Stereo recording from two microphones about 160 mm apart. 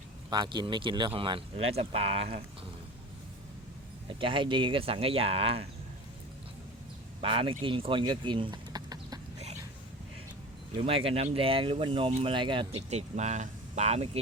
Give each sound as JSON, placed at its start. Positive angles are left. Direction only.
{"t": 0.3, "sound": "speech", "side_deg": -25}
{"t": 4.2, "sound": "speech", "side_deg": -30}
{"t": 7.2, "sound": "speech", "side_deg": -35}
{"t": 10.8, "sound": "speech", "side_deg": -35}
{"t": 12.9, "sound": "speech", "side_deg": -45}